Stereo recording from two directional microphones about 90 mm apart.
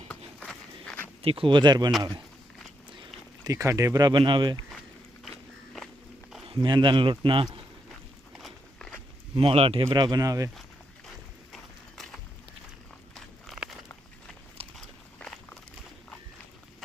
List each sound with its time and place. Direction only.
0.3 s walk: 5° left (ahead or behind)
1.2 s speech: 90° right; by 1.9 s 55° right (ahead or behind)
3.4 s speech: 35° right (ahead or behind)
4.1 s speech: 60° right (ahead or behind)
6.6 s speech: 60° right (ahead or behind)
9.3 s speech: 90° right
9.9 s speech: 50° right (ahead or behind)
11.5 s a sound: 5° left (ahead or behind)
13.5 s walk: centre (ahead or behind)
14.6 s a sound: 90° right
15.2 s a sound: 10° left (ahead or behind)